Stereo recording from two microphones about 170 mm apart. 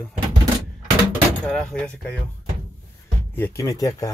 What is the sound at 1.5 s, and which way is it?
Speech, 5° left (ahead or behind).